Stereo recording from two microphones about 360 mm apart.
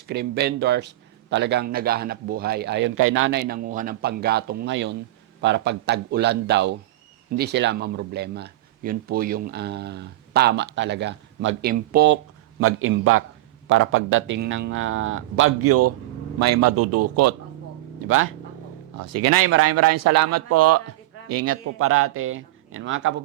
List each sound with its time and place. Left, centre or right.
0.1 s speech: right